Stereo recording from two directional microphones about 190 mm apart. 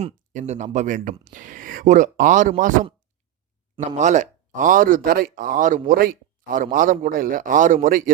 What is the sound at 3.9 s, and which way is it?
Speech, 40° right (ahead or behind).